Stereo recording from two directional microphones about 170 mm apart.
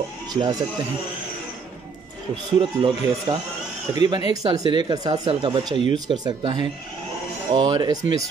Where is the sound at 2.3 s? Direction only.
25° right (ahead or behind).